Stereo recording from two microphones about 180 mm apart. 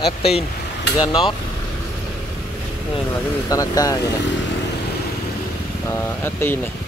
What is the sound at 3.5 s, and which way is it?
Speech, 20° left (ahead or behind).